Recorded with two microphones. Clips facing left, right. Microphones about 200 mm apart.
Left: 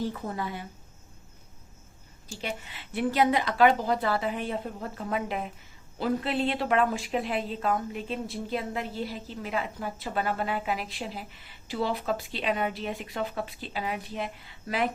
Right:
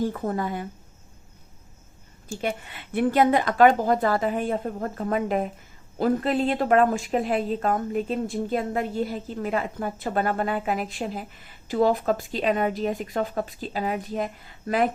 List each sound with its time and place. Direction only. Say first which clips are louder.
0.0 s speech: right 6 dB; 50° right (ahead or behind)
2.3 s speech: right 7 dB; 50° right (ahead or behind)